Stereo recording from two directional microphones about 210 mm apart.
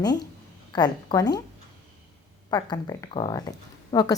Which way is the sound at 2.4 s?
20° left (ahead or behind).